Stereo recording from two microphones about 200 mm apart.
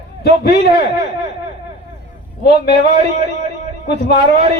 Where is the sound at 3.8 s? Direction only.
50° left (ahead or behind).